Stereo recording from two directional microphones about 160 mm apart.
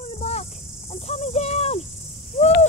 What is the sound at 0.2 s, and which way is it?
Insect, 40° left (ahead or behind).